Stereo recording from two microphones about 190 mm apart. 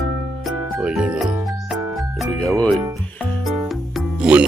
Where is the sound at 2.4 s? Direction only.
5° left (ahead or behind).